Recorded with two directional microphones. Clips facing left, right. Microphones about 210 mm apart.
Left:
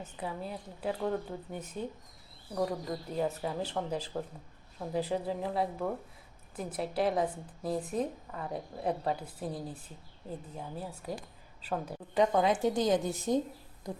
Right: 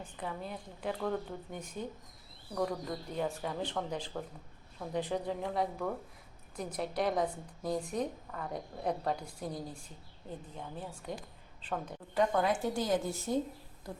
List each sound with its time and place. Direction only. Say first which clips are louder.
0.2 s a woman's voice: left 2 dB; 10° left (ahead or behind)